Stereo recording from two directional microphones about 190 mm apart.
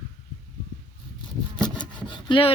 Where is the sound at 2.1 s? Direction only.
25° left (ahead or behind).